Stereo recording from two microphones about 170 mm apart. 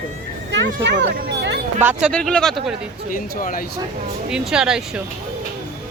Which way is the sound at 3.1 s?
55° left (ahead or behind).